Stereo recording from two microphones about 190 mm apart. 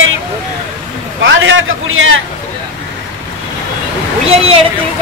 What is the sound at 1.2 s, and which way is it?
A man's voice, 80° right.